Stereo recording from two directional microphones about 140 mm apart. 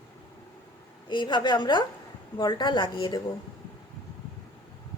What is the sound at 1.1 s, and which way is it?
A woman's voice, 35° left (ahead or behind).